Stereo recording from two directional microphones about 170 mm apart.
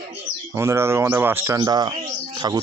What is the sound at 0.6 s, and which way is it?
Speech, 15° right (ahead or behind).